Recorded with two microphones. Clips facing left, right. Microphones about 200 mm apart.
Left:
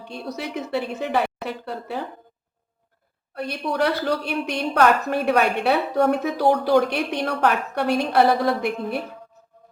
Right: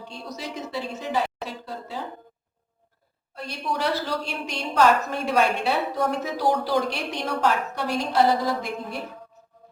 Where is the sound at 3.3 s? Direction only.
60° left (ahead or behind).